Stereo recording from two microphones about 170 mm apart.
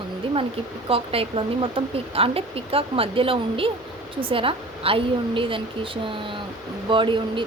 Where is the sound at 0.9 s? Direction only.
35° right (ahead or behind).